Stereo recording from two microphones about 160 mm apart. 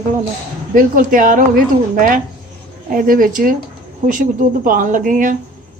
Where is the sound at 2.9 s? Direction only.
60° right (ahead or behind).